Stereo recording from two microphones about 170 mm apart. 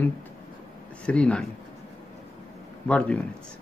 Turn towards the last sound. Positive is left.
turn(degrees=5)  # may be behind; listen again after turning